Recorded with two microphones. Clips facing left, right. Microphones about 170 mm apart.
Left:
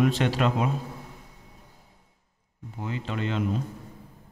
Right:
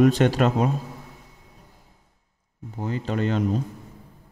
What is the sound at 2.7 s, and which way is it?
Speech, 40° right (ahead or behind).